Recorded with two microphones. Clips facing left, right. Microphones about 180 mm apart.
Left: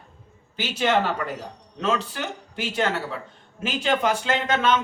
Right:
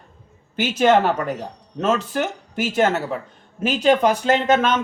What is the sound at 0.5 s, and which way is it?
Speech, 45° right (ahead or behind).